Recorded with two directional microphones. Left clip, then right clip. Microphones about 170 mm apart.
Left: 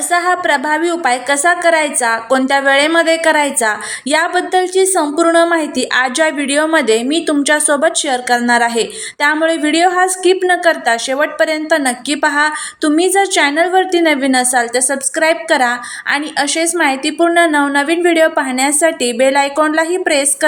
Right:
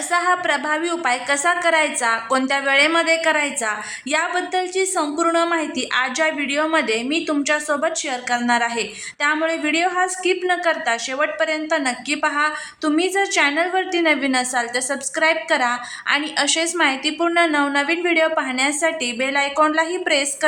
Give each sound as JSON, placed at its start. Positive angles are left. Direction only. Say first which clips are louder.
{"t": 0.1, "sound": "a woman's voice", "louder": "left 6 dB", "side_deg": 20}